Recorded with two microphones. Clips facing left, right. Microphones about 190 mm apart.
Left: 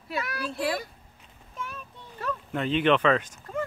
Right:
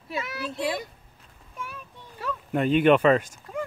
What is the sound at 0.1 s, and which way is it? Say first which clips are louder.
Speech: even; 25° right (ahead or behind).